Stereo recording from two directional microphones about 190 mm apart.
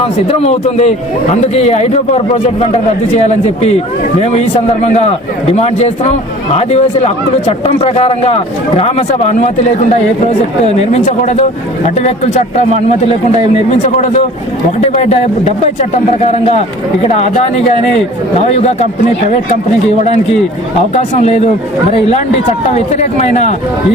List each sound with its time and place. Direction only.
0.0 s speech: 30° left (ahead or behind)
10.7 s speech: 35° left (ahead or behind)
13.7 s speech: 40° left (ahead or behind)
18.5 s speech: 35° left (ahead or behind)
20.9 s speech: 35° left (ahead or behind)
22.9 s speech: 35° left (ahead or behind)